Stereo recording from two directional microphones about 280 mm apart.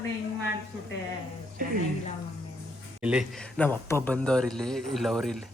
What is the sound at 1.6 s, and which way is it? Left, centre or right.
Speech, right.